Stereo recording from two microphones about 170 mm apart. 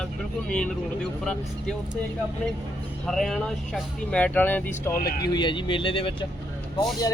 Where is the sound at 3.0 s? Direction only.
5° left (ahead or behind).